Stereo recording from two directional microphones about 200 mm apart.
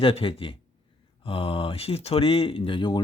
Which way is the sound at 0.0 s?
25° left (ahead or behind).